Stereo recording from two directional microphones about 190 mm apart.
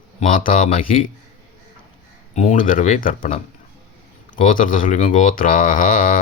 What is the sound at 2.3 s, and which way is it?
Speech, 40° left (ahead or behind).